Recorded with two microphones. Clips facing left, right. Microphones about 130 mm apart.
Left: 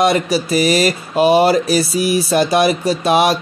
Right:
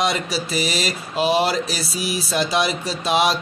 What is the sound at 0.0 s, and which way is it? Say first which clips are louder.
Speech: left 8 dB; 55° left (ahead or behind).